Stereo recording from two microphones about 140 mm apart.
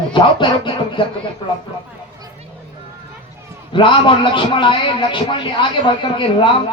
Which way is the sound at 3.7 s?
35° left (ahead or behind).